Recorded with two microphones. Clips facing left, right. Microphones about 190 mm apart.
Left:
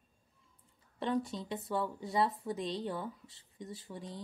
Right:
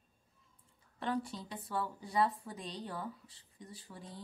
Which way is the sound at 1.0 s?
25° left (ahead or behind).